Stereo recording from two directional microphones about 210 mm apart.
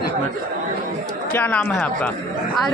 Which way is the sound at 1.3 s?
10° left (ahead or behind).